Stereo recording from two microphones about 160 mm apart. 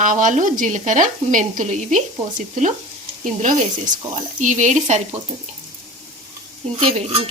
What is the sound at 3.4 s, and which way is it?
Speech, 55° right (ahead or behind).